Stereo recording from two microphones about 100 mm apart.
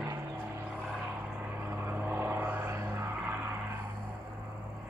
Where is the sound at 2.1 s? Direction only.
20° right (ahead or behind).